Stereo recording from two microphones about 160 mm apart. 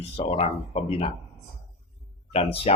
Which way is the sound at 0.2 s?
40° left (ahead or behind).